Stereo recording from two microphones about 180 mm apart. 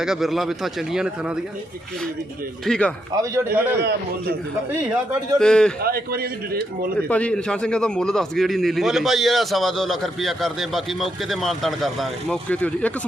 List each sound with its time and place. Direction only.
0.0 s a man's voice: centre (ahead or behind)
2.6 s a man's voice: 5° left (ahead or behind)
3.2 s a man's voice: 15° right (ahead or behind)
3.8 s a man's voice: 65° right (ahead or behind)
5.4 s a man's voice: 5° left (ahead or behind)
5.8 s a man's voice: 60° right (ahead or behind)
7.1 s a man's voice: 5° left (ahead or behind)